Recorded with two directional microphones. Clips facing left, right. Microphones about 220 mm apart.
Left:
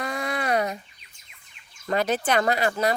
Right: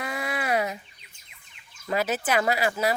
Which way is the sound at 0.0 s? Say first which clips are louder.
Left 2 dB; 5° right (ahead or behind).